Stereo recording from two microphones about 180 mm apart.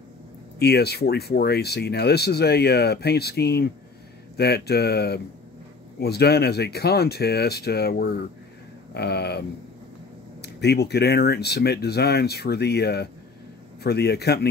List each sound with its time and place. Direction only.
0.6 s speech: 65° left (ahead or behind)
10.4 s speech: 65° left (ahead or behind)